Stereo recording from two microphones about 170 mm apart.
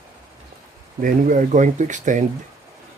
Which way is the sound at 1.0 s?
50° right (ahead or behind).